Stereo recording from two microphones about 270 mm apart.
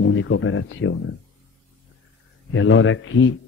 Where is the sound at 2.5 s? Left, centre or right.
Left.